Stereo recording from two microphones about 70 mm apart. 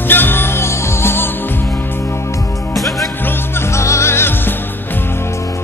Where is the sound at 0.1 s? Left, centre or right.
Left.